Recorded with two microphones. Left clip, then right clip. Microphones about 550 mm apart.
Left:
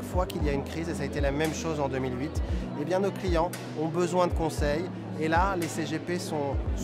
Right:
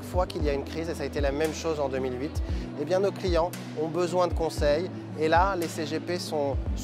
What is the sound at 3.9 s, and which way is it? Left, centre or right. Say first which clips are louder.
Speech: even; left.